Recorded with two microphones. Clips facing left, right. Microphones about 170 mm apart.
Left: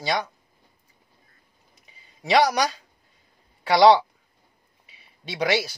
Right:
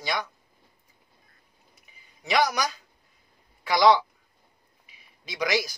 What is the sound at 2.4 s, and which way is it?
Speech, 35° left (ahead or behind).